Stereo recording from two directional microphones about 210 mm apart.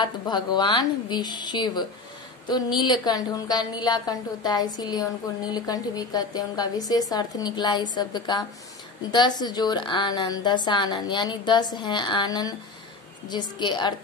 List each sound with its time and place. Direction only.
0.0 s speech: 20° left (ahead or behind)